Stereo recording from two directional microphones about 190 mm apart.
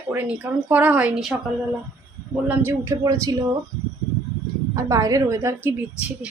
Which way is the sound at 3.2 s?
20° right (ahead or behind).